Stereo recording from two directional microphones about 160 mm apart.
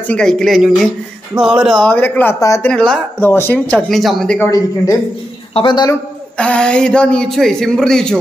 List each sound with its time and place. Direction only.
0.0 s speech: 5° left (ahead or behind)
1.8 s speech: 10° left (ahead or behind)
2.7 s speech: 5° left (ahead or behind)
4.4 s a man's voice: 20° left (ahead or behind)
6.3 s speech: 5° left (ahead or behind)